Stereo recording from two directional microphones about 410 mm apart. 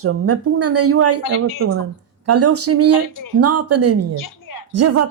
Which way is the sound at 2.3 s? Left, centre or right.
Right.